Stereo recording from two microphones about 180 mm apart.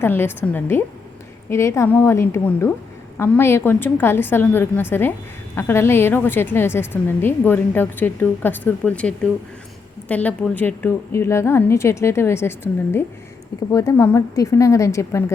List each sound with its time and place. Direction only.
0.0 s a woman's voice: 10° left (ahead or behind)